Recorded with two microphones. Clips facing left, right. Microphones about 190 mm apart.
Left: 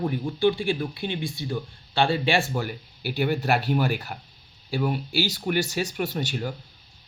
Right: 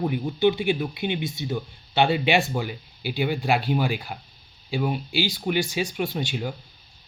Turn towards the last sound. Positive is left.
turn(degrees=-10)  # may be behind; listen again after turning